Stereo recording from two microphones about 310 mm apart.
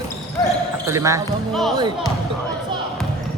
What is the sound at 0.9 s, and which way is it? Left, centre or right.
Speech, centre.